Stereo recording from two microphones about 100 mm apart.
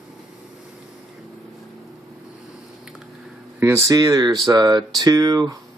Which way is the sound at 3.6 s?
30° right (ahead or behind).